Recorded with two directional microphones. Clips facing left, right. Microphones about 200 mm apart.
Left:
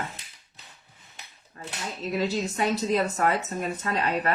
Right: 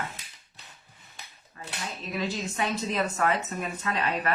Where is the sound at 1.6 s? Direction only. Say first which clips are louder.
Left 3 dB; 45° left (ahead or behind).